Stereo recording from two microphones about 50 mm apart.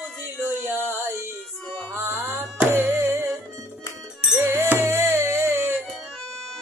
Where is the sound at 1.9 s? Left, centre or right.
Right.